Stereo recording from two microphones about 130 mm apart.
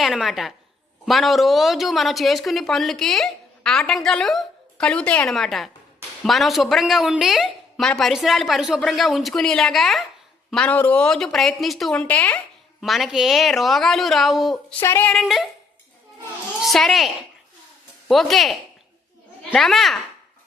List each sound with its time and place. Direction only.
0.0 s speech: centre (ahead or behind)
12.8 s speech: centre (ahead or behind)
14.8 s speech: 15° left (ahead or behind)
15.1 s speech: centre (ahead or behind)
16.6 s speech: centre (ahead or behind)
18.1 s speech: centre (ahead or behind)
19.5 s speech: centre (ahead or behind)